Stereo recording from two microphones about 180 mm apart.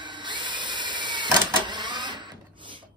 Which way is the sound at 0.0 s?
25° right (ahead or behind).